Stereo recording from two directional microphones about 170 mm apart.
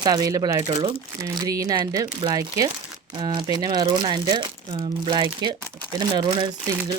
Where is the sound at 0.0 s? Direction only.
20° right (ahead or behind).